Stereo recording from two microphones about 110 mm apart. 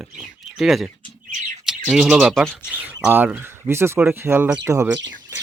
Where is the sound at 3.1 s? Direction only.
20° right (ahead or behind).